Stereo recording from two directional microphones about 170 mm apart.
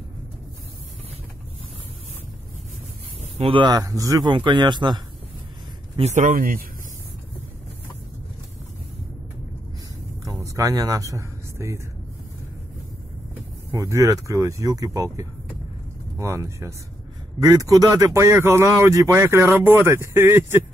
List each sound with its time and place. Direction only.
3.2 s speech: 35° right (ahead or behind)
5.9 s speech: 40° right (ahead or behind)
10.4 s speech: 20° right (ahead or behind)
13.7 s speech: 20° right (ahead or behind)